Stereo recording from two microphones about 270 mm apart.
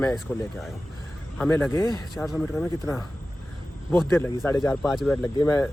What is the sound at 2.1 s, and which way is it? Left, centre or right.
Speech, centre.